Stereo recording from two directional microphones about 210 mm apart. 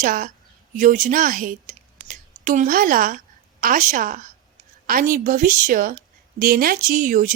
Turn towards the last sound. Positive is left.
turn(degrees=-40)  # may be behind; listen again after turning